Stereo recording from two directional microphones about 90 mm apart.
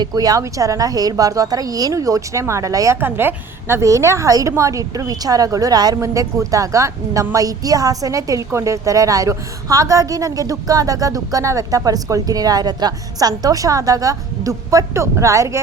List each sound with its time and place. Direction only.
0.0 s a woman's voice: 45° right (ahead or behind)
3.0 s a woman's voice: 25° right (ahead or behind)